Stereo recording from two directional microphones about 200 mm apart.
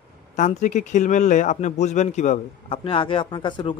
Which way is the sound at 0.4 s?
35° left (ahead or behind).